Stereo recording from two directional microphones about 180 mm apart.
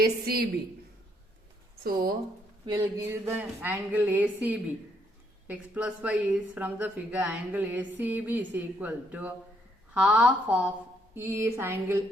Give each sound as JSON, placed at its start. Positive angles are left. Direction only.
{"t": 0.0, "sound": "a woman's voice", "side_deg": -60}
{"t": 1.8, "sound": "a woman's voice", "side_deg": -55}
{"t": 2.6, "sound": "a sound", "side_deg": -25}
{"t": 3.0, "sound": "speech", "side_deg": -10}